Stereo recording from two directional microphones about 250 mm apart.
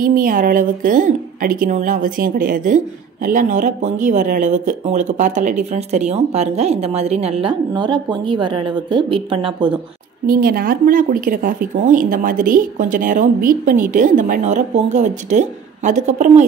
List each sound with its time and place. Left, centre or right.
0.0 s a woman's voice: right
10.2 s speech: right